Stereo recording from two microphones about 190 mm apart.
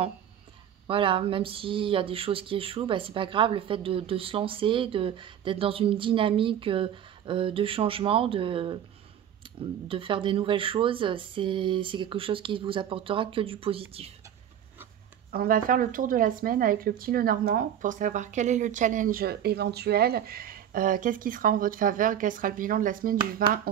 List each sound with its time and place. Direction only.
0.8 s speech: 30° right (ahead or behind)
15.3 s speech: 50° right (ahead or behind)